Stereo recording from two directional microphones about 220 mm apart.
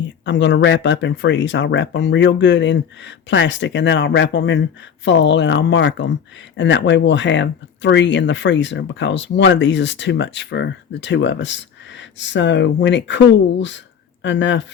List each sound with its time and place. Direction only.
0.3 s speech: 55° left (ahead or behind)